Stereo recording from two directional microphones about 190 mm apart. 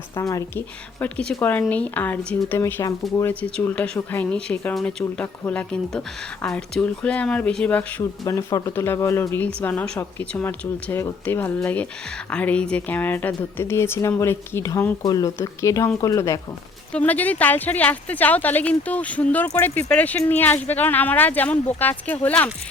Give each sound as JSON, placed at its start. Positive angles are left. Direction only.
{"t": 0.2, "sound": "speech", "side_deg": 15}